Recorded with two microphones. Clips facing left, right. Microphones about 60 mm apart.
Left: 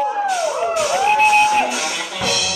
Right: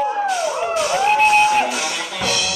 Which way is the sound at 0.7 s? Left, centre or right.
Centre.